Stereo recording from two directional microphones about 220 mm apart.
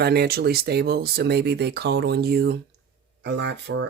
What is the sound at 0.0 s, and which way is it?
Speech, 45° right (ahead or behind).